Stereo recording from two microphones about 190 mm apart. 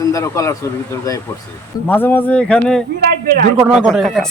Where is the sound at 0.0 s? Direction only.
15° left (ahead or behind).